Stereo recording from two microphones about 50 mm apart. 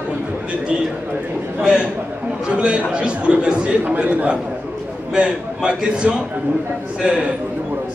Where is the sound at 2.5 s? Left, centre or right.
Right.